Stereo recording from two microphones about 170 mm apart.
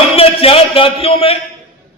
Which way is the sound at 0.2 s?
35° left (ahead or behind).